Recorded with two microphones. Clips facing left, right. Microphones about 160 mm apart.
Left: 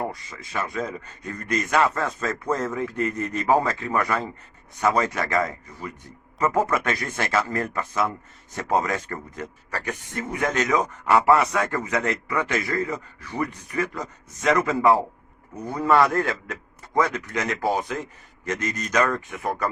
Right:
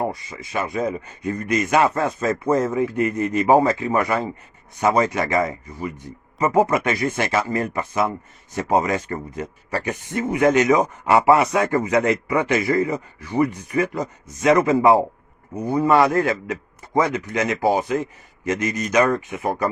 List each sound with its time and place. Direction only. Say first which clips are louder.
0.0 s speech: right 5 dB; 20° right (ahead or behind)